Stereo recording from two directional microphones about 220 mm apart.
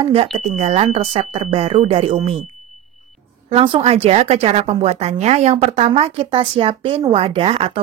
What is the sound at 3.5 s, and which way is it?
Speech, 25° right (ahead or behind).